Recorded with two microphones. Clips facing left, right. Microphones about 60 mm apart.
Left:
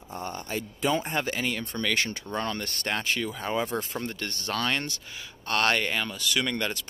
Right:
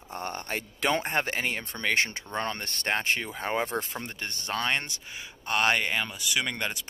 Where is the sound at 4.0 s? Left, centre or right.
Right.